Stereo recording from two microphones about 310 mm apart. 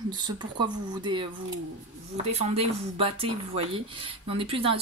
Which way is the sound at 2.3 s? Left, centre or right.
Centre.